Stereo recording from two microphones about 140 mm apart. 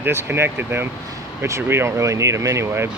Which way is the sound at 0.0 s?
15° right (ahead or behind).